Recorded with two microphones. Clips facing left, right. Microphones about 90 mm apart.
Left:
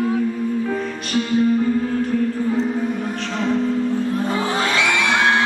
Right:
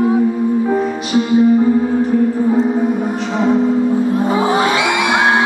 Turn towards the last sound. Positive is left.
turn(degrees=-15)  # may be behind; listen again after turning